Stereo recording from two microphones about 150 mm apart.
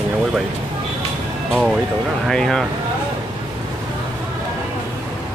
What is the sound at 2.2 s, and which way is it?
Speech, 5° left (ahead or behind).